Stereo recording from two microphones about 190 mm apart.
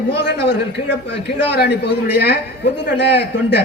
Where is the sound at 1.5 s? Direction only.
60° left (ahead or behind).